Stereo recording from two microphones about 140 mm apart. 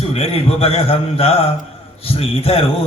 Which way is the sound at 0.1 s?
45° left (ahead or behind).